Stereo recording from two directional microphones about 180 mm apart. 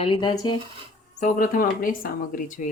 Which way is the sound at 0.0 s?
25° left (ahead or behind).